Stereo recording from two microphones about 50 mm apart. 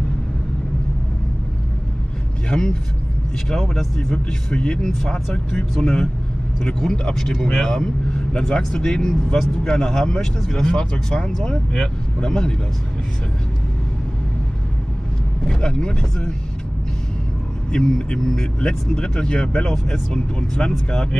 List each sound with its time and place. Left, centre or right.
3.4 s speech: centre
7.8 s speech: left
15.4 s speech: centre
17.7 s speech: centre